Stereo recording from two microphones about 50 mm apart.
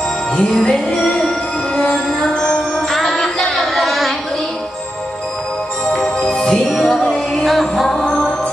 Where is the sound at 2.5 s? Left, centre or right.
Centre.